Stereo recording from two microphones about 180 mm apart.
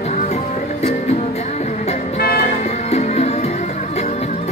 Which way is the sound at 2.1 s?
60° left (ahead or behind).